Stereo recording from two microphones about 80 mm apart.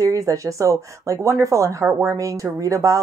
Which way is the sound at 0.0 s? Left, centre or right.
Right.